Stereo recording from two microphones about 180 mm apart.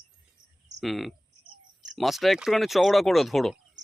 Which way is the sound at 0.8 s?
Centre (ahead or behind).